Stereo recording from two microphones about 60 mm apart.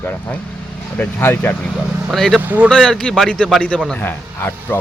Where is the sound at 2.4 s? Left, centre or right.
Right.